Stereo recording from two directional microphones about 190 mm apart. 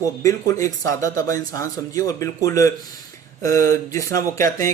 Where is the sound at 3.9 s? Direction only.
15° left (ahead or behind).